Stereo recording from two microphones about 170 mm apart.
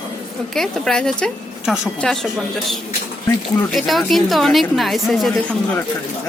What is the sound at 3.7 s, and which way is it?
Speech, centre (ahead or behind).